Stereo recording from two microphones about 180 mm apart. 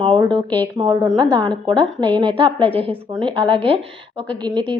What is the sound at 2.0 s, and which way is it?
A woman's voice, 25° right (ahead or behind).